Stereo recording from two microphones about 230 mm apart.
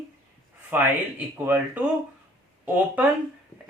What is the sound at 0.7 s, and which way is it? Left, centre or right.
Speech, centre.